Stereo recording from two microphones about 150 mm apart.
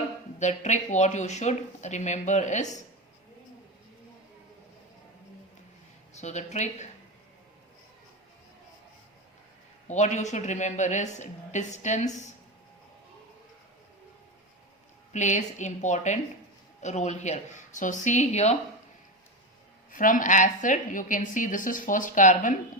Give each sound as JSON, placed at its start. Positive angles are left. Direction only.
{"t": 0.3, "sound": "a woman's voice", "side_deg": 50}
{"t": 6.1, "sound": "a woman's voice", "side_deg": 50}
{"t": 9.8, "sound": "a woman's voice", "side_deg": 50}
{"t": 15.1, "sound": "a woman's voice", "side_deg": 50}
{"t": 19.9, "sound": "a woman's voice", "side_deg": 60}